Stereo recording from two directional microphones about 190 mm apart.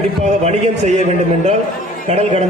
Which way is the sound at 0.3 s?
35° right (ahead or behind).